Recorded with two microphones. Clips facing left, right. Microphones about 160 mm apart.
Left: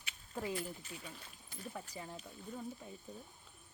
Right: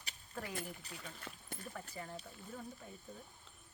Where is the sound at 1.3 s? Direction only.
85° right.